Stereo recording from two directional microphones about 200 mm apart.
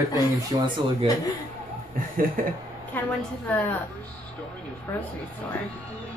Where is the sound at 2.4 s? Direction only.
45° right (ahead or behind).